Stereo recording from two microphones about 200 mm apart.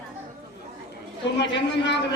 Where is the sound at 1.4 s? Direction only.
60° left (ahead or behind).